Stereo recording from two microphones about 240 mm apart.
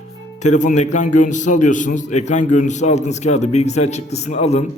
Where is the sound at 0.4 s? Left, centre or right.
Left.